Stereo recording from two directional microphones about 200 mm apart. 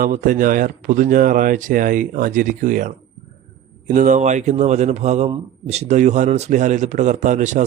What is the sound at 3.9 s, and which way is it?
Speech, 40° right (ahead or behind).